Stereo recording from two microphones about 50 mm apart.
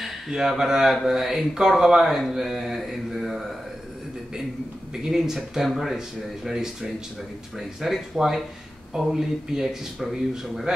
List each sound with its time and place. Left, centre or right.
0.0 s speech: centre
2.3 s mantra: centre
4.9 s speech: centre
7.5 s mantra: centre
8.9 s speech: centre